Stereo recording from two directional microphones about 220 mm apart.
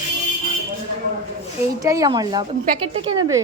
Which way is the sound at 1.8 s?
15° right (ahead or behind).